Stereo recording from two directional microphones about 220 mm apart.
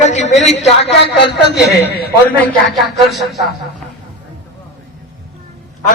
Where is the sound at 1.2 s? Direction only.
50° left (ahead or behind).